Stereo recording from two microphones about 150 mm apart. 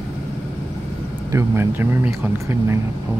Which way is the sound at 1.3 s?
15° right (ahead or behind).